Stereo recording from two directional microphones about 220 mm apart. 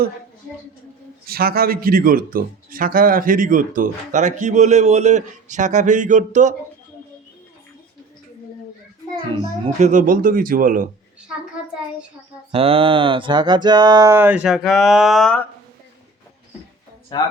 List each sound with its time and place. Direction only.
1.3 s speech: 45° right (ahead or behind)
9.8 s speech: 35° right (ahead or behind)
12.5 s mantra: 25° right (ahead or behind); by 15.4 s 5° left (ahead or behind)
17.1 s speech: 20° left (ahead or behind)